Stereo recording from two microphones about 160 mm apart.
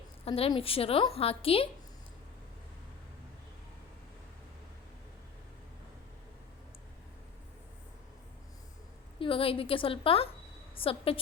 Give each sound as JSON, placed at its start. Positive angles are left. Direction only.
{"t": 0.3, "sound": "a woman's voice", "side_deg": 35}
{"t": 9.1, "sound": "a woman's voice", "side_deg": 35}